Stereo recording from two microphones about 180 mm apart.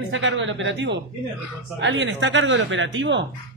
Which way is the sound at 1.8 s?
90° right.